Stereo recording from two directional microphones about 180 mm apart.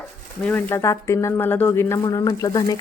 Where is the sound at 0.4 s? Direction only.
10° left (ahead or behind).